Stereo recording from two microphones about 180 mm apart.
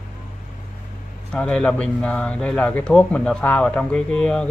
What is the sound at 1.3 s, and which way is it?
A man's voice, 5° left (ahead or behind).